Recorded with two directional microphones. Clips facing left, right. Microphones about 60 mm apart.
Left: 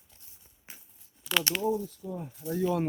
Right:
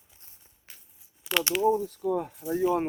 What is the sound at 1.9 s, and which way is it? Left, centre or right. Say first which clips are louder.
Speech: right 10 dB; right.